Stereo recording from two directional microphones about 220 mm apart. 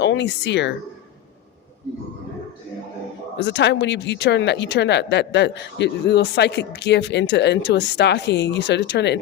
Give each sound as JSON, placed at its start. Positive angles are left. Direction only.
{"t": 0.0, "sound": "speech", "side_deg": 55}
{"t": 3.3, "sound": "speech", "side_deg": 50}